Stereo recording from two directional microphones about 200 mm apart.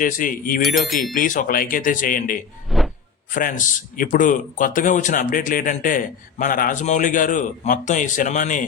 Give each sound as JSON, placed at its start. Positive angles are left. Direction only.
{"t": 0.0, "sound": "speech", "side_deg": 40}
{"t": 2.6, "sound": "a sound", "side_deg": 0}
{"t": 3.3, "sound": "a man's voice", "side_deg": 40}